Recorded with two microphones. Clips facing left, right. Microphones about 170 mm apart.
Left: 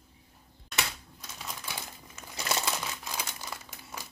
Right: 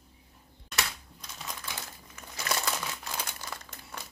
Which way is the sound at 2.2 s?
25° left (ahead or behind).